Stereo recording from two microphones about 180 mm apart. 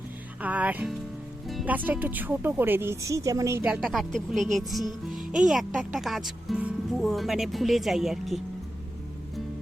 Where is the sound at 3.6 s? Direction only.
5° right (ahead or behind).